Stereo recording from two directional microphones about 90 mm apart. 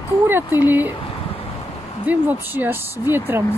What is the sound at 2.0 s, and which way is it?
Speech, 20° right (ahead or behind).